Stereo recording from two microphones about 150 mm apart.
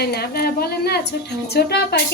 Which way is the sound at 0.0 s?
90° left.